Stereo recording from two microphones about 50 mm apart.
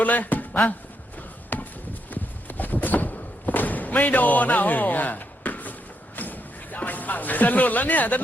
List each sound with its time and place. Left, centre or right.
0.0 s music: left
1.5 s chop: left
2.0 s a sound: left
6.1 s music: left